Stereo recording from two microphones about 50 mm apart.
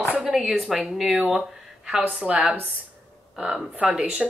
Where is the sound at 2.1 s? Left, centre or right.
Right.